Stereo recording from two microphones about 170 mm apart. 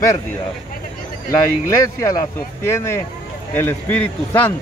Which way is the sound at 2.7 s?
15° left (ahead or behind).